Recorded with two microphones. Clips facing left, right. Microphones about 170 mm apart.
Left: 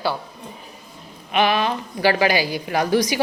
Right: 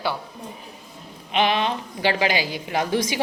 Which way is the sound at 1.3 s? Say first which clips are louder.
Left 2 dB; 20° right (ahead or behind).